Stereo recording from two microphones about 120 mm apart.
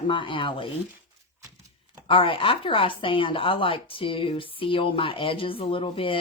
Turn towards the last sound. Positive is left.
turn(degrees=50)  # may be behind; listen again after turning